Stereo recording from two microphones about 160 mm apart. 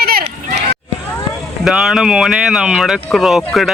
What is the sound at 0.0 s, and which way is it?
Run, 70° right (ahead or behind).